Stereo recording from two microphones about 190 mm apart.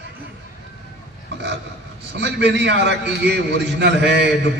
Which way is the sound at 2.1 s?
65° right (ahead or behind).